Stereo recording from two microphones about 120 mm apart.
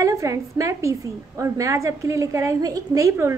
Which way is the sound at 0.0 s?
25° right (ahead or behind).